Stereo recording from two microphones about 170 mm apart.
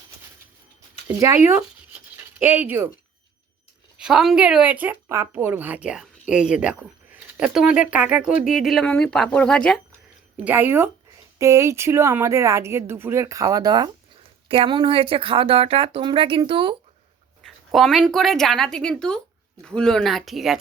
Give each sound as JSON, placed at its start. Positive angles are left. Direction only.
{"t": 1.0, "sound": "speech", "side_deg": -15}
{"t": 3.9, "sound": "speech", "side_deg": -5}
{"t": 10.4, "sound": "speech", "side_deg": -10}
{"t": 17.4, "sound": "speech", "side_deg": 0}